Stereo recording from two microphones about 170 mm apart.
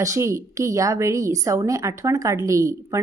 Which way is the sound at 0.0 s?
15° right (ahead or behind).